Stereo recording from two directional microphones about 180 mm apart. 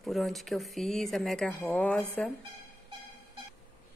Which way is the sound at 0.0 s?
Centre (ahead or behind).